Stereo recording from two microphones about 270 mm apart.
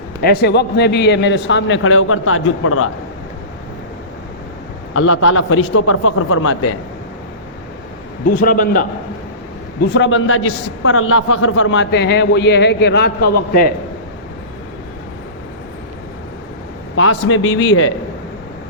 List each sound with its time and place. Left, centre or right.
0.2 s a man's voice: left
4.9 s a man's voice: left
8.4 s speech: left
9.9 s a man's voice: left
17.0 s a man's voice: left